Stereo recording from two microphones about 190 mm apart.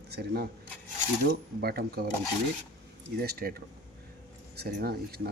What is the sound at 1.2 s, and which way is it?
Cutlery, 55° right (ahead or behind).